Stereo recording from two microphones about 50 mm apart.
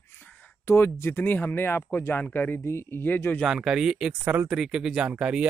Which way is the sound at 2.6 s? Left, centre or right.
Left.